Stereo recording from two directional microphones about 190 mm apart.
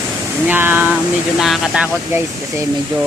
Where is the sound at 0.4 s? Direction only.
10° right (ahead or behind).